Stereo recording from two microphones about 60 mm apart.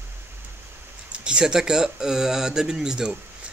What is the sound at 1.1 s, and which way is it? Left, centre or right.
Speech, centre.